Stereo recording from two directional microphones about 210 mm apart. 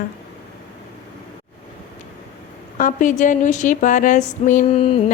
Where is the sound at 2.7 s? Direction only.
35° left (ahead or behind).